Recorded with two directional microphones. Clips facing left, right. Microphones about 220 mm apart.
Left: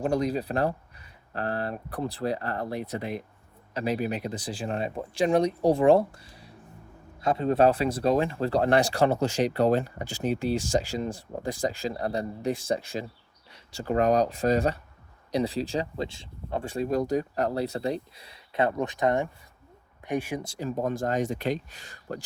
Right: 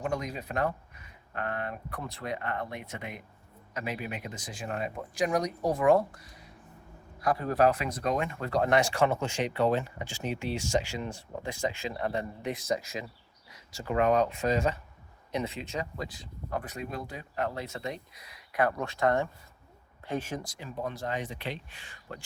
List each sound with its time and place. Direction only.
0.0 s speech: 35° left (ahead or behind); by 20.4 s 15° left (ahead or behind)
20.6 s speech: 45° left (ahead or behind)